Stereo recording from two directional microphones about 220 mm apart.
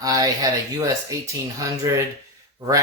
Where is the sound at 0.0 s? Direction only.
15° right (ahead or behind).